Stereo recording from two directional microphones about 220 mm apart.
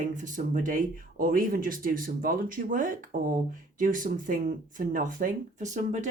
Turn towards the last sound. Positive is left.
turn(degrees=-35)  # may be behind; listen again after turning